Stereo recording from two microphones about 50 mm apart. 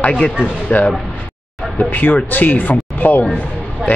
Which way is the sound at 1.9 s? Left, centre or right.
Left.